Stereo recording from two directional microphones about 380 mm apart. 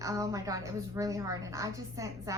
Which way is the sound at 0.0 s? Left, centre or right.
Centre.